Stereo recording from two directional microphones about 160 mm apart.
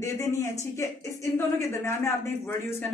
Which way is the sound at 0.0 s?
20° left (ahead or behind).